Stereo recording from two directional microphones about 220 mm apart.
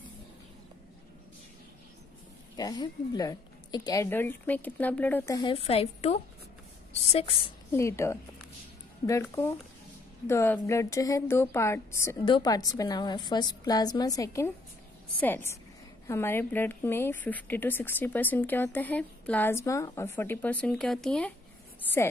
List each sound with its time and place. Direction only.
2.5 s a woman's voice: 20° left (ahead or behind)
7.7 s a woman's voice: 10° left (ahead or behind)